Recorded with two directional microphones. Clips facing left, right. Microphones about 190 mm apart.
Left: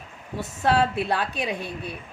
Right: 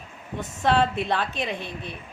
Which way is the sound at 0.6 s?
5° left (ahead or behind).